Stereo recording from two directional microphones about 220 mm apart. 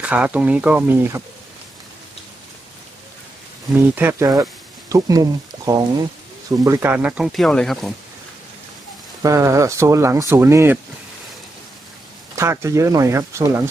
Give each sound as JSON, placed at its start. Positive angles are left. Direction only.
{"t": 0.0, "sound": "speech", "side_deg": -5}
{"t": 3.9, "sound": "speech", "side_deg": -10}
{"t": 9.2, "sound": "speech", "side_deg": -15}
{"t": 12.4, "sound": "speech", "side_deg": -15}